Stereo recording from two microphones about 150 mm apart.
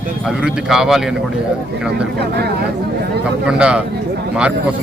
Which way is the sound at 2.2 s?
90° right.